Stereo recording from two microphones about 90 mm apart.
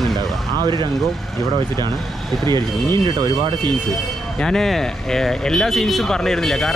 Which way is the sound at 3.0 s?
55° right (ahead or behind).